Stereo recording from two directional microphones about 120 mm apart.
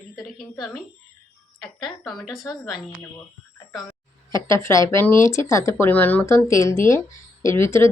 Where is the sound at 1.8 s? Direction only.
5° left (ahead or behind).